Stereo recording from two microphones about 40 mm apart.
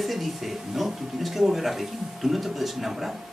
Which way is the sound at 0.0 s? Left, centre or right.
Centre.